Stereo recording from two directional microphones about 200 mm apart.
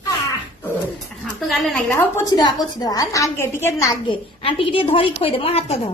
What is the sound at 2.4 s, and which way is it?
A woman's voice, 20° left (ahead or behind).